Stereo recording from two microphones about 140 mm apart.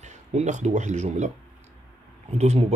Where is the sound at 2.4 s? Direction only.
50° right (ahead or behind).